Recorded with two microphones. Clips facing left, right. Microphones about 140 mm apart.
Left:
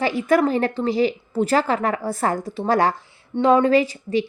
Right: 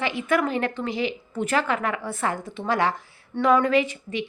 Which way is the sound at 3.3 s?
30° left (ahead or behind).